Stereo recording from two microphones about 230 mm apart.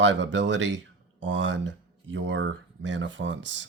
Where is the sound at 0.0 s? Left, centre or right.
Right.